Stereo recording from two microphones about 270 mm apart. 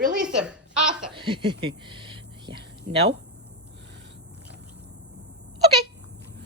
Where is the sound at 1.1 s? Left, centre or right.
Centre.